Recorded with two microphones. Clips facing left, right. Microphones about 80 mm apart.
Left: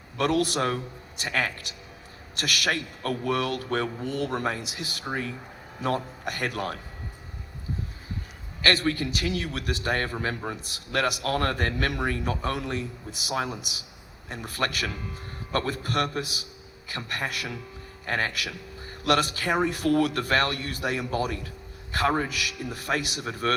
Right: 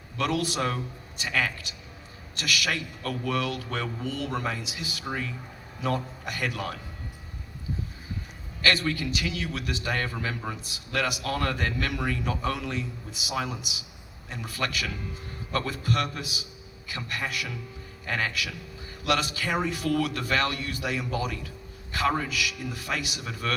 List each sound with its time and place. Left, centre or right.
0.2 s a man's voice: left
8.6 s a man's voice: left
14.3 s a man's voice: left